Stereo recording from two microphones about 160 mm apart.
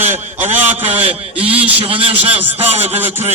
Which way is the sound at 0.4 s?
10° right (ahead or behind).